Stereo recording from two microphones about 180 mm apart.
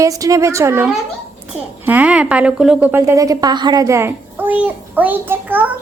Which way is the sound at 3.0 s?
20° right (ahead or behind).